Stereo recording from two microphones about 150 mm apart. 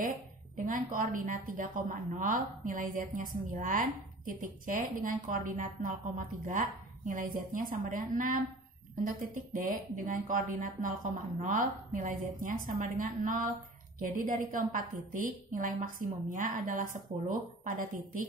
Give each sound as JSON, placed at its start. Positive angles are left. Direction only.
{"t": 0.7, "sound": "a woman's voice", "side_deg": -65}